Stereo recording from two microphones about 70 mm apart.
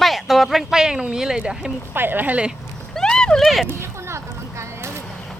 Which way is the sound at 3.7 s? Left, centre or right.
Right.